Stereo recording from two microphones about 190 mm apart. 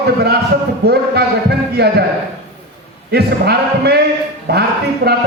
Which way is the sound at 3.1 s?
55° right (ahead or behind).